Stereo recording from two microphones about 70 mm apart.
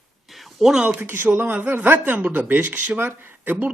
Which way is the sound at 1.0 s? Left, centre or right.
Right.